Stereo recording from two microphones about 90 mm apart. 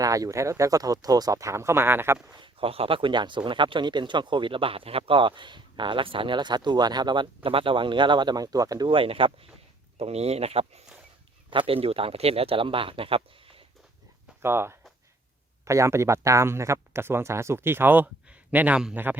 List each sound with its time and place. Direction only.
0.0 s speech: 40° right (ahead or behind)
2.4 s speech: 85° right; by 8.9 s 45° right (ahead or behind)
8.9 s speech: 80° right
10.5 s speech: 90° right
14.4 s speech: 30° right (ahead or behind)